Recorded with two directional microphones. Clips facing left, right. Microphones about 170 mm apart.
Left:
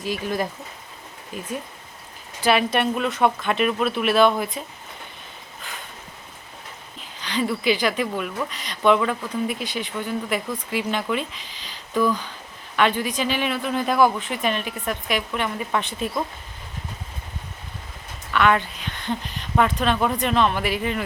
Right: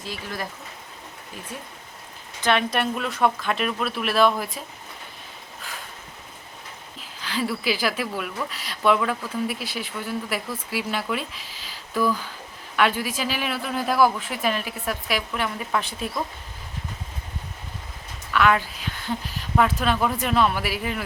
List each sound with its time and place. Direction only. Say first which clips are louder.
0.0 s speech: left 8 dB; 15° left (ahead or behind)
2.4 s speech: left 3 dB; 5° left (ahead or behind)
7.2 s speech: left 2 dB; 5° right (ahead or behind)
18.3 s speech: left 1 dB; 5° right (ahead or behind)